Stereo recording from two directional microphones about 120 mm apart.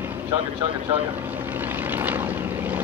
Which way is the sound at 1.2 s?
15° right (ahead or behind).